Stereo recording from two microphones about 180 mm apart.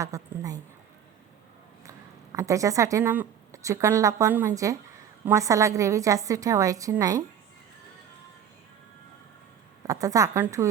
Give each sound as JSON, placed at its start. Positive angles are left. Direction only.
{"t": 0.0, "sound": "a woman's voice", "side_deg": -20}
{"t": 1.8, "sound": "a woman's voice", "side_deg": -20}
{"t": 9.8, "sound": "a woman's voice", "side_deg": -20}